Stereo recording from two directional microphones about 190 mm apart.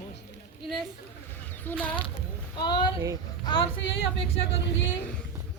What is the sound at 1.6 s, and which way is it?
Female singing, 10° left (ahead or behind).